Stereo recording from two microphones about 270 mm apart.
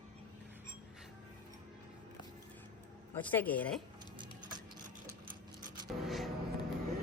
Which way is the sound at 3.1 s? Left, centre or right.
Centre.